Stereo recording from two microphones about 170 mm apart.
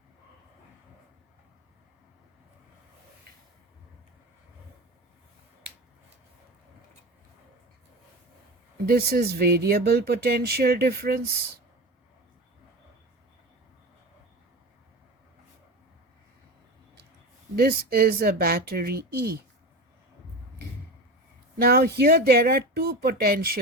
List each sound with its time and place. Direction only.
8.9 s speech: 65° right (ahead or behind)
17.5 s speech: 65° right (ahead or behind)
21.6 s speech: 65° right (ahead or behind)